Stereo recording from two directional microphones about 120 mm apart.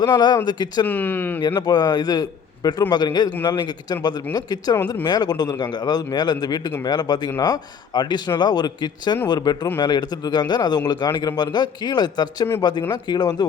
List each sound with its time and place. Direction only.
0.0 s speech: 35° left (ahead or behind)
0.9 s speech: 15° left (ahead or behind)
1.4 s speech: 35° left (ahead or behind)